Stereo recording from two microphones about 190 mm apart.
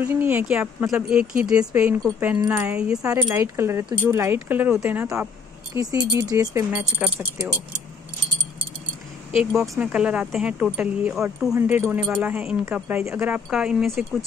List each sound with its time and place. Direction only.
0.0 s speech: 10° right (ahead or behind)
3.0 s speech: 15° right (ahead or behind)
9.3 s speech: 5° right (ahead or behind)